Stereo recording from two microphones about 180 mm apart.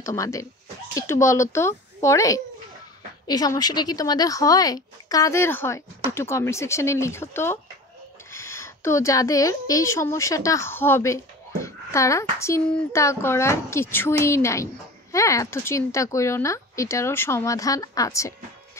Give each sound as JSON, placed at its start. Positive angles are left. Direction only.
{"t": 0.0, "sound": "speech", "side_deg": 15}